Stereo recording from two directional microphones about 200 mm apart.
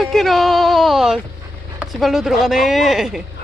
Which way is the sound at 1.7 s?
Centre (ahead or behind).